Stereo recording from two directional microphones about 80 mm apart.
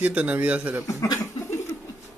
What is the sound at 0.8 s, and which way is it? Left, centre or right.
Speech, left.